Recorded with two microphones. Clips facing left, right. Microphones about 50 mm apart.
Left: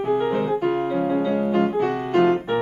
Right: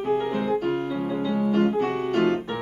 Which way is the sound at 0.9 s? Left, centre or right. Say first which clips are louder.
Left 5 dB; left.